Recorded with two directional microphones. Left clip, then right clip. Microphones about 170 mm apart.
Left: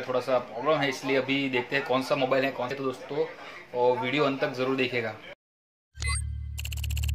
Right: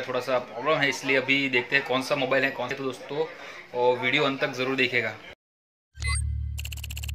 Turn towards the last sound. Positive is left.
turn(degrees=0)  # may be behind; listen again after turning